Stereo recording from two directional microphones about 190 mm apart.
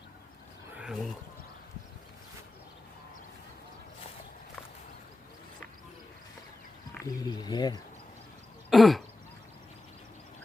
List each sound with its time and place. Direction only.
0.7 s a sound: 5° right (ahead or behind)
7.0 s speech: 20° left (ahead or behind)
8.7 s throat clearing: centre (ahead or behind)